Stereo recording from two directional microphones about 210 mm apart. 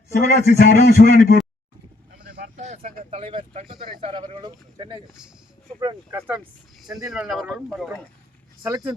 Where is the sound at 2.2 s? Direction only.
35° right (ahead or behind); by 6.2 s 15° right (ahead or behind).